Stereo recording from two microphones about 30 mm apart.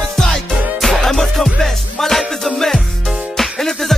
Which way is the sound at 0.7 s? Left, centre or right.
Centre.